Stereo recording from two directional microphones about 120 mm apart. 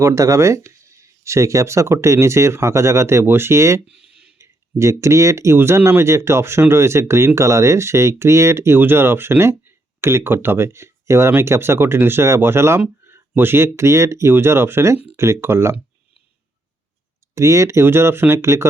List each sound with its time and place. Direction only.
0.0 s speech: 25° right (ahead or behind)
3.8 s a sound: 5° right (ahead or behind)
4.4 s speech: 25° right (ahead or behind)
17.3 s speech: 25° right (ahead or behind)